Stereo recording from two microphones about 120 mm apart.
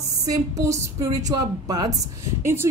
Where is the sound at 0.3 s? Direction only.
25° right (ahead or behind).